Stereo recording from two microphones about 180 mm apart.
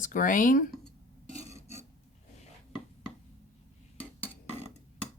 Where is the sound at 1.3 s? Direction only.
35° left (ahead or behind).